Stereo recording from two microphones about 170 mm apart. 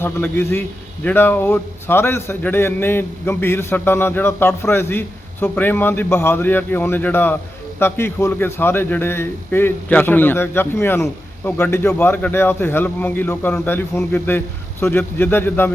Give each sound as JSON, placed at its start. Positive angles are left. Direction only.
{"t": 0.0, "sound": "a man's voice", "side_deg": 15}